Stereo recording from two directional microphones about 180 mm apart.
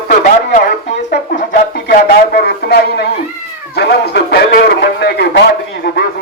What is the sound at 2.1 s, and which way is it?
Speech, 60° left (ahead or behind).